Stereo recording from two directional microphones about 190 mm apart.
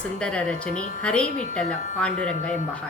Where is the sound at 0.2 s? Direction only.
5° left (ahead or behind).